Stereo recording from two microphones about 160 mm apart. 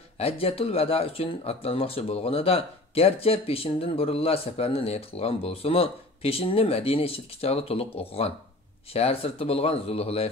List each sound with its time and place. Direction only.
0.2 s speech: 40° left (ahead or behind)